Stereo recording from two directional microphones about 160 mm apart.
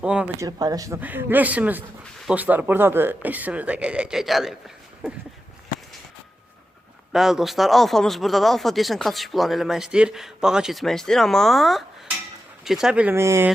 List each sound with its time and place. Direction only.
0.0 s speech: 5° right (ahead or behind)
0.3 s speech: 20° right (ahead or behind)
0.9 s speech: 10° right (ahead or behind)
7.1 s speech: centre (ahead or behind)